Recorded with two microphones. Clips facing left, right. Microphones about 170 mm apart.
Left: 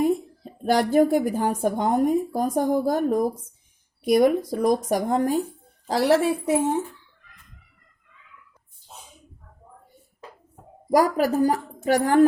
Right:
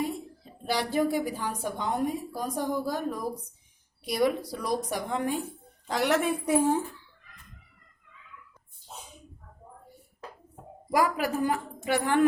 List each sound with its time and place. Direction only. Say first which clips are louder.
0.6 s a woman's voice: left 8 dB; 50° left (ahead or behind); by 6.8 s 25° left (ahead or behind)
10.9 s speech: left 7 dB; 40° left (ahead or behind)